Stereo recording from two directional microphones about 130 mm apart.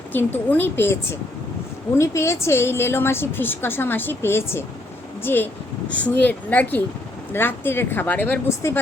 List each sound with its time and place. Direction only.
0.1 s a woman's voice: 15° left (ahead or behind)
2.0 s a woman's voice: 20° left (ahead or behind)
8.4 s speech: 20° left (ahead or behind)